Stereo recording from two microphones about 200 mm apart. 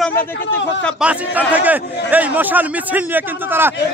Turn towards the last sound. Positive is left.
turn(degrees=-10)  # may be behind; listen again after turning